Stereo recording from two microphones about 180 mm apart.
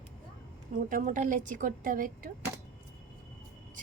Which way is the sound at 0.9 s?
50° right (ahead or behind).